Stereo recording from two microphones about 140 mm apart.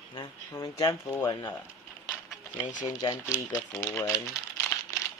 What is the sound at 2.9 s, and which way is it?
Speech, 30° left (ahead or behind).